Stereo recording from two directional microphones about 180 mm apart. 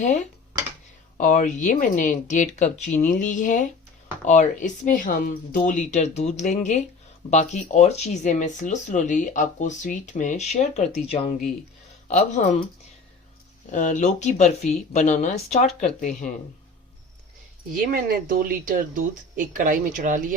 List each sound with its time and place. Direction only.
1.2 s speech: 45° left (ahead or behind)
13.7 s speech: 45° left (ahead or behind)
17.7 s speech: 50° right (ahead or behind)